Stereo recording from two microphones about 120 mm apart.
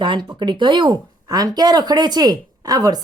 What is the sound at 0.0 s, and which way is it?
A woman's voice, 40° right (ahead or behind).